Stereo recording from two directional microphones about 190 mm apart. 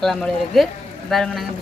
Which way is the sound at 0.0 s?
5° left (ahead or behind).